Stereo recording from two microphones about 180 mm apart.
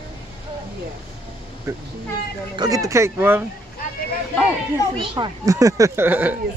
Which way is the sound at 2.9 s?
15° right (ahead or behind).